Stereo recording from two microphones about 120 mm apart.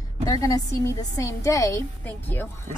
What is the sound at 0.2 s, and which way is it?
A woman's voice, 30° left (ahead or behind).